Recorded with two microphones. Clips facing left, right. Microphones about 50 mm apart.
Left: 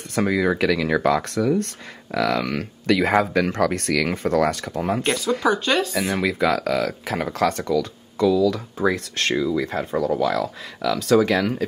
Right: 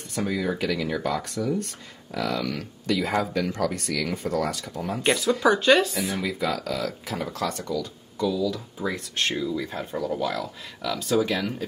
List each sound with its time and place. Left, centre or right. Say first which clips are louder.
0.1 s speech: left 6 dB; left
5.0 s speech: right 3 dB; centre
6.1 s speech: left 9 dB; left